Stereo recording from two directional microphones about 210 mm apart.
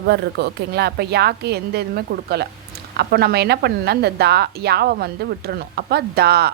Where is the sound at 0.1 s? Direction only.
50° right (ahead or behind).